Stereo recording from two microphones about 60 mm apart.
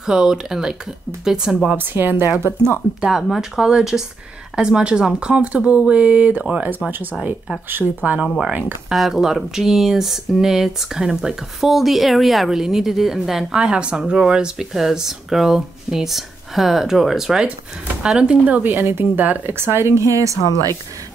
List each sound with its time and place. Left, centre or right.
0.0 s speech: centre
1.8 s a woman's voice: right
3.0 s speech: centre; by 6.4 s right
7.7 s speech: right
8.9 s speech: centre
18.4 s speech: right
18.7 s a woman's voice: right